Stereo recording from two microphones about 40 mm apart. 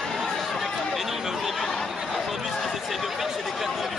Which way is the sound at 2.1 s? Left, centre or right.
Centre.